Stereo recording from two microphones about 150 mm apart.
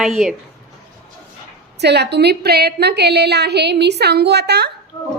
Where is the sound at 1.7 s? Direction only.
90° right.